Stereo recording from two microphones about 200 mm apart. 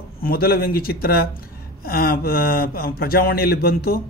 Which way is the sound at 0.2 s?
50° left (ahead or behind).